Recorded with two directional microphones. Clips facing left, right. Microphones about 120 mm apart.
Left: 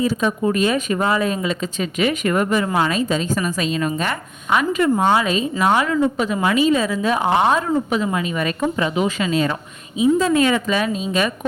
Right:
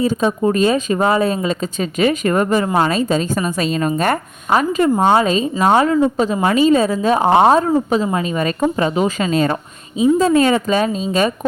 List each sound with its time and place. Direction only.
0.2 s a woman's voice: 35° right (ahead or behind)